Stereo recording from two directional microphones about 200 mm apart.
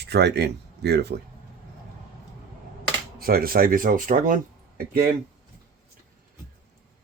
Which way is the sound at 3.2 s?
45° right (ahead or behind).